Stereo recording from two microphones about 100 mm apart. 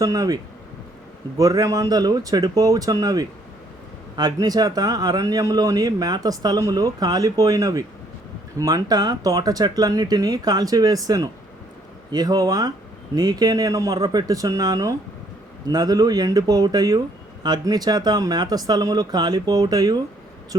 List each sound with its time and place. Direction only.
0.0 s a man's voice: 35° right (ahead or behind)
1.4 s a man's voice: 40° right (ahead or behind)